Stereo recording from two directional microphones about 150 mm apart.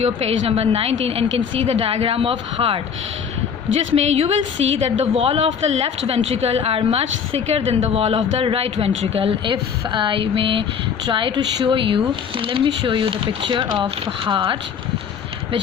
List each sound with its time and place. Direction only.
0.0 s a woman's voice: 40° right (ahead or behind)
3.9 s a woman's voice: 45° right (ahead or behind)